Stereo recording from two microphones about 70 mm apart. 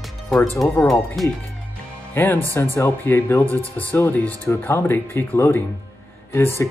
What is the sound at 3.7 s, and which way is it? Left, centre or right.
Speech, left.